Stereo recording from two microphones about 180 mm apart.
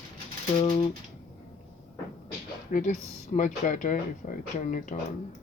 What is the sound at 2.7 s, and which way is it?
Speech, 45° left (ahead or behind).